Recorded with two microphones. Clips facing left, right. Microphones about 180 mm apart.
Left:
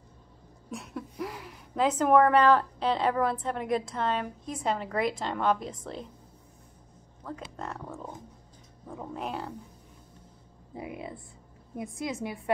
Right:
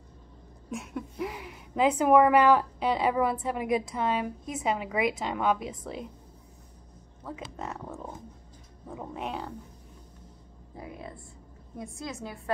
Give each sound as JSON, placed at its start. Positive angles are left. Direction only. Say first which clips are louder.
{"t": 0.7, "sound": "a woman's voice", "louder": "right 2 dB", "side_deg": 0}
{"t": 7.5, "sound": "a woman's voice", "louder": "right 1 dB", "side_deg": -5}
{"t": 10.7, "sound": "a woman's voice", "louder": "left 3 dB", "side_deg": 20}